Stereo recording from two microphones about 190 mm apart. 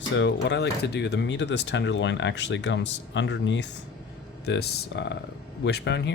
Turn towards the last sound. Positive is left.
turn(degrees=65)  # may be behind; listen again after turning